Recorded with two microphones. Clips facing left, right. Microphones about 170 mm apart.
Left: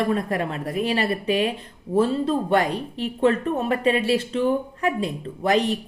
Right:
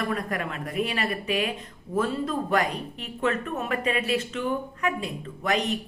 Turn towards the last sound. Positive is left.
turn(degrees=30)  # may be behind; listen again after turning